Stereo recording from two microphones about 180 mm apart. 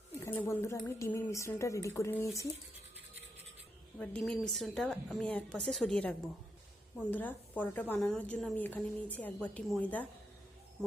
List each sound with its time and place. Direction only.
0.2 s a woman's voice: 15° left (ahead or behind)
3.9 s a woman's voice: 5° left (ahead or behind)